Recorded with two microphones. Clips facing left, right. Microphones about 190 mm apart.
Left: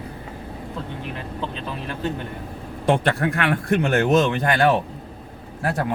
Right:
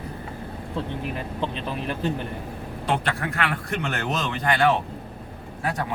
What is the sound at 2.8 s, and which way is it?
Speech, 50° left (ahead or behind).